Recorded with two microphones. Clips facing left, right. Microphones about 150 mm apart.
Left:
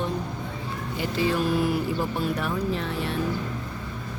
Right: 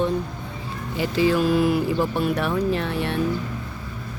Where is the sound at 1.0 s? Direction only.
90° right.